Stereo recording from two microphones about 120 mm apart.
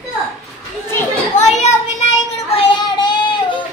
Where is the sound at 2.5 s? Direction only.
45° left (ahead or behind).